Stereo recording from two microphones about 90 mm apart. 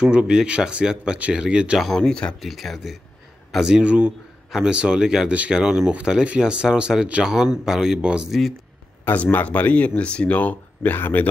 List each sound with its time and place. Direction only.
0.0 s speech: 10° right (ahead or behind)
1.9 s speech: 5° left (ahead or behind)
9.0 s speech: 20° left (ahead or behind)